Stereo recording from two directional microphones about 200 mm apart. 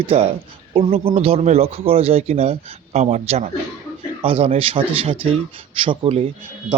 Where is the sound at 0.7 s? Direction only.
30° right (ahead or behind).